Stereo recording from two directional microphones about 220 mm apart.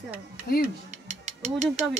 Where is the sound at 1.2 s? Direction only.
30° right (ahead or behind).